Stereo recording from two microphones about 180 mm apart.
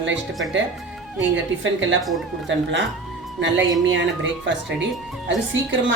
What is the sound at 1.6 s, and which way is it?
Speech, 90° right.